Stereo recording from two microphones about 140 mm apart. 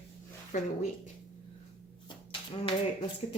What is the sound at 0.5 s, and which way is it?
Speech, 70° left (ahead or behind).